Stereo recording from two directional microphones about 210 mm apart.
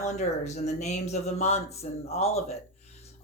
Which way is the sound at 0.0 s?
35° left (ahead or behind).